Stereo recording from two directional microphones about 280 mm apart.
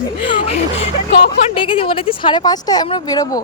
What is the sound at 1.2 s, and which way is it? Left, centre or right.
A woman's voice, centre.